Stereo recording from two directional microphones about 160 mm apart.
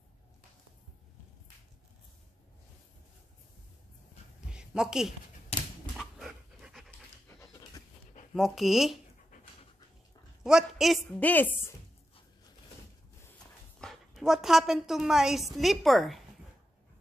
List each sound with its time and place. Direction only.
4.5 s a sound: 5° right (ahead or behind)
5.5 s a sound: 40° left (ahead or behind)
5.9 s dog: centre (ahead or behind)
7.2 s pant: 20° left (ahead or behind)
8.4 s speech: centre (ahead or behind)
10.4 s a woman's voice: centre (ahead or behind)
11.1 s a woman's voice: 10° left (ahead or behind)
13.7 s a woman's voice: centre (ahead or behind)